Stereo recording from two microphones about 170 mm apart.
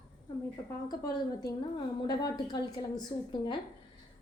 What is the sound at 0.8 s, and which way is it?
A woman's voice, 20° left (ahead or behind).